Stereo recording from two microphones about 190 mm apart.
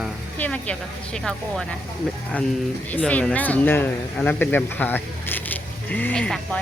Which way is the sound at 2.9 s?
5° left (ahead or behind).